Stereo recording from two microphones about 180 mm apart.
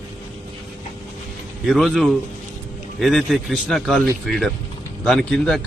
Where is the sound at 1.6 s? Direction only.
Centre (ahead or behind).